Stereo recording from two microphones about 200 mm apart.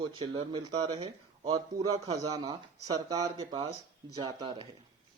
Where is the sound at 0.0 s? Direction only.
25° right (ahead or behind).